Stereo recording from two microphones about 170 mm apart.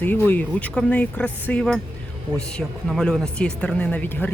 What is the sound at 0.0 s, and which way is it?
Speech, 10° left (ahead or behind).